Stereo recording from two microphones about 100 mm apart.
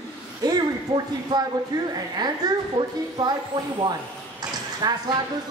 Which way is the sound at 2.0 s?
40° right (ahead or behind).